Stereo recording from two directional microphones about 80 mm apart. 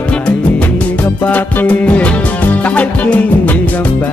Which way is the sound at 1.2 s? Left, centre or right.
Centre.